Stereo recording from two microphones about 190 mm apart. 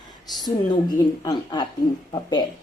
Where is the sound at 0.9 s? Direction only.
20° left (ahead or behind).